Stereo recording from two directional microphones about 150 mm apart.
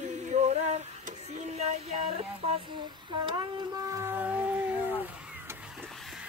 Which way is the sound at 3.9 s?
15° right (ahead or behind).